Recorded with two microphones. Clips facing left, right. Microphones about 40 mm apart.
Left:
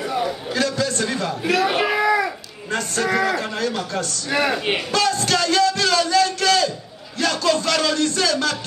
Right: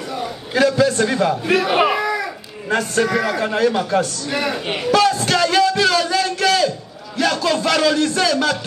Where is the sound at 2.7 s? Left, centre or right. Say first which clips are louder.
Right 4 dB; centre.